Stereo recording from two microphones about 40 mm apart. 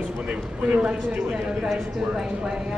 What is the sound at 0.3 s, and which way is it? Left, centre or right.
A woman's voice, right.